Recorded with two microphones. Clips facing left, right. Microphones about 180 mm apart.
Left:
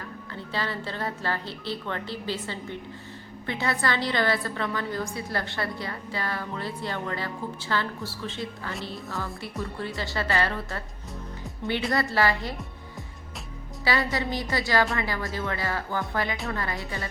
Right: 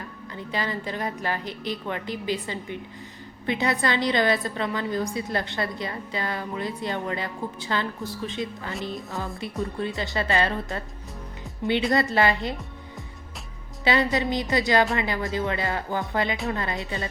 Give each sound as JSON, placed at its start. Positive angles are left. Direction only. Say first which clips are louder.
{"t": 0.3, "sound": "a woman's voice", "louder": "right 2 dB", "side_deg": -15}
{"t": 13.8, "sound": "a woman's voice", "louder": "right 4 dB", "side_deg": -20}